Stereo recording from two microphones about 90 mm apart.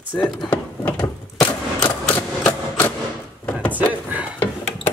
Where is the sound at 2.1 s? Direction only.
20° left (ahead or behind).